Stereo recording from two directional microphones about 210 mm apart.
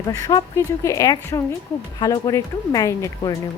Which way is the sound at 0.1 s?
20° left (ahead or behind).